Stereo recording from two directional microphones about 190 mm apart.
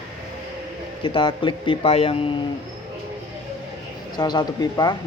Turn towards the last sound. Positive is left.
turn(degrees=20)  # may be behind; listen again after turning